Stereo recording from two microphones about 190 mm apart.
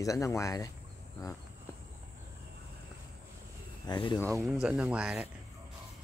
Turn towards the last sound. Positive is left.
turn(degrees=-5)  # may be behind; listen again after turning